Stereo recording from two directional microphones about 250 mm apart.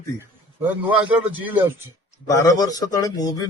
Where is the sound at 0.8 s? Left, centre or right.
Centre.